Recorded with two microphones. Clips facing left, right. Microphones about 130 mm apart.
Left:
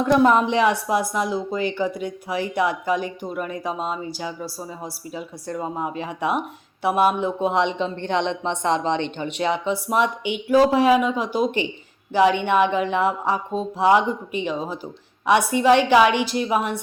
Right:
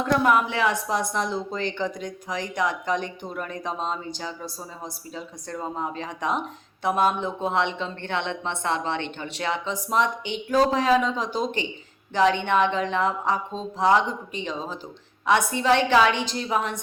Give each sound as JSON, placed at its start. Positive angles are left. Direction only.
{"t": 0.0, "sound": "speech", "side_deg": 15}